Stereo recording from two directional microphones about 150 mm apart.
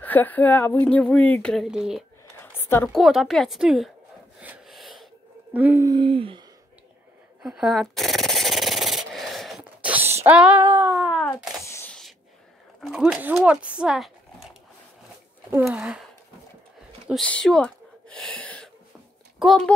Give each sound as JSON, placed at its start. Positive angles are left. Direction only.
{"t": 0.0, "sound": "speech", "side_deg": 10}
{"t": 2.4, "sound": "a sound", "side_deg": 15}
{"t": 2.9, "sound": "a woman's voice", "side_deg": 0}
{"t": 4.4, "sound": "snort", "side_deg": -5}
{"t": 5.5, "sound": "female singing", "side_deg": -10}
{"t": 5.9, "sound": "speech", "side_deg": -35}
{"t": 7.4, "sound": "sanding", "side_deg": 0}
{"t": 10.2, "sound": "female singing", "side_deg": -10}
{"t": 11.0, "sound": "a sound", "side_deg": -5}
{"t": 11.2, "sound": "a sound", "side_deg": 15}
{"t": 12.8, "sound": "a woman's voice", "side_deg": 0}
{"t": 15.7, "sound": "a woman's voice", "side_deg": -5}
{"t": 17.1, "sound": "a sound", "side_deg": 5}
{"t": 19.4, "sound": "a woman's voice", "side_deg": 0}